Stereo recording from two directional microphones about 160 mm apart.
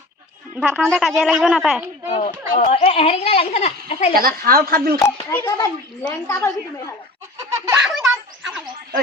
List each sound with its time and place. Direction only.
0.6 s speech: 5° right (ahead or behind)
2.0 s speech: 45° left (ahead or behind)
4.1 s a woman's voice: 65° right (ahead or behind)
5.3 s a woman's voice: 15° left (ahead or behind)
7.7 s a sound: centre (ahead or behind)